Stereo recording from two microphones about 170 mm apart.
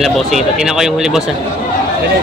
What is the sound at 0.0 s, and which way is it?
Speech, centre (ahead or behind).